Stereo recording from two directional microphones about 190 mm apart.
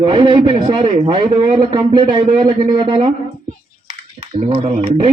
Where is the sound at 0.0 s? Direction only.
25° right (ahead or behind).